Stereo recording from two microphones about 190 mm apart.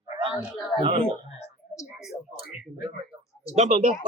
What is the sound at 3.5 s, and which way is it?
Speech, 40° right (ahead or behind).